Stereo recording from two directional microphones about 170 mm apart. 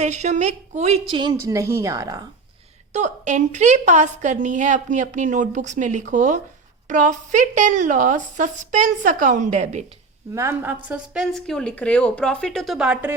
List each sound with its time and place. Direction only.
0.0 s a woman's voice: 45° right (ahead or behind); by 2.2 s 20° right (ahead or behind)
2.9 s a woman's voice: 45° right (ahead or behind)
10.3 s a woman's voice: 15° right (ahead or behind)